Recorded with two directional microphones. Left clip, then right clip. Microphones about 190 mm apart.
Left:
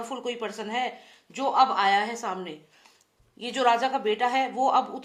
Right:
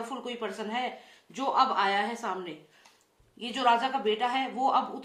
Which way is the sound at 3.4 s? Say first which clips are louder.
Left 2 dB; 40° left (ahead or behind).